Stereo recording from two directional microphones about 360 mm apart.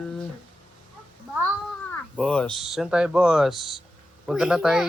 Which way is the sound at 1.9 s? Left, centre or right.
Centre.